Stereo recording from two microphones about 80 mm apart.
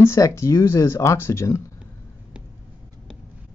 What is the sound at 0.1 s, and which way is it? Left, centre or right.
Speech, left.